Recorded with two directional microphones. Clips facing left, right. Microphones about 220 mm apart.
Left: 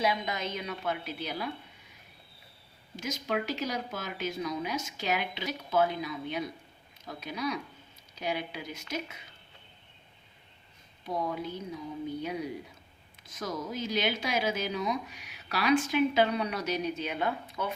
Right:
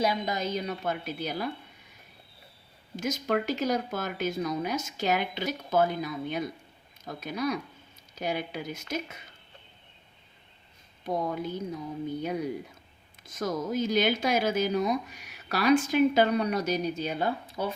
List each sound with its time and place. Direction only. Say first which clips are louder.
0.0 s a woman's voice: right 3 dB; 40° right (ahead or behind)
2.9 s speech: right 4 dB; 50° right (ahead or behind)
11.0 s speech: right 3 dB; 50° right (ahead or behind)